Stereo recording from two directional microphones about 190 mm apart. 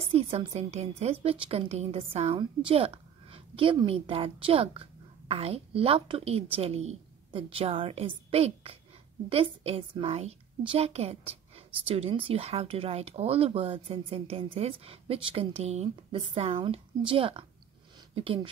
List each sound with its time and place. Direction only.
0.0 s a woman's voice: 30° right (ahead or behind)